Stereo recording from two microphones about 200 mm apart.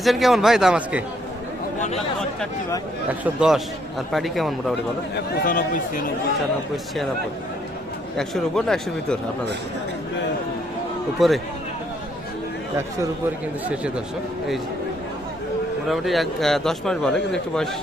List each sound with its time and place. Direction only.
0.0 s a man's voice: centre (ahead or behind)
3.1 s a man's voice: 5° right (ahead or behind)
5.1 s speech: 50° left (ahead or behind)
8.1 s a man's voice: 5° left (ahead or behind)
11.2 s a man's voice: centre (ahead or behind)
13.7 s a man's voice: 5° right (ahead or behind)
15.9 s a man's voice: centre (ahead or behind)